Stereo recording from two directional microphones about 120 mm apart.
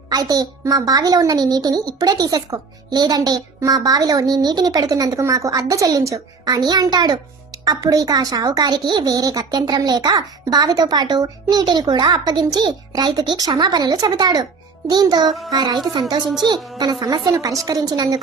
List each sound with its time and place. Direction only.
0.1 s a child's voice: 30° right (ahead or behind)